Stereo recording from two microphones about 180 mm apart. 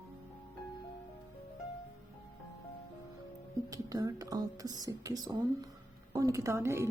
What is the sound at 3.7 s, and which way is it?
Speech, 20° right (ahead or behind).